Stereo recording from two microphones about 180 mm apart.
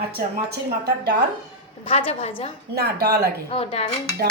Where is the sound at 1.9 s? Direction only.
30° left (ahead or behind).